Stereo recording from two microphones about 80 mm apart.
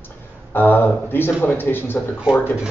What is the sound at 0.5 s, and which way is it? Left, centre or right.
Speech, left.